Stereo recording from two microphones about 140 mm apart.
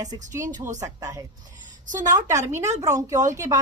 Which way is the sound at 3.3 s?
20° right (ahead or behind).